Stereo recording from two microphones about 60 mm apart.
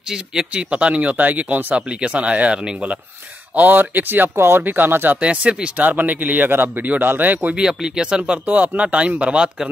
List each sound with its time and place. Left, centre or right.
0.1 s speech: centre; by 5.2 s right
5.2 s speech: centre
7.5 s speech: centre